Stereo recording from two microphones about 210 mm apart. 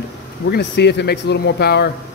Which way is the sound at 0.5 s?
55° left (ahead or behind).